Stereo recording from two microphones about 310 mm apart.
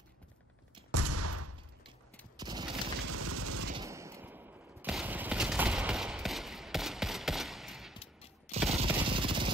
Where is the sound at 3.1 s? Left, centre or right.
Right.